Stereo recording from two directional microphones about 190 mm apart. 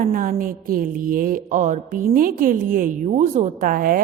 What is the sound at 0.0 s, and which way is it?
Speech, 50° right (ahead or behind).